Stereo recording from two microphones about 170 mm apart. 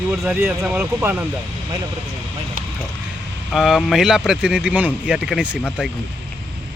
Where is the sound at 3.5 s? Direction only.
Centre (ahead or behind).